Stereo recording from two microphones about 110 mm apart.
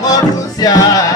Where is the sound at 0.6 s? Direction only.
35° left (ahead or behind).